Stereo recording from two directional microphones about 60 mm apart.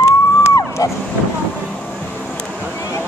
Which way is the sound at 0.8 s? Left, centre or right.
Left.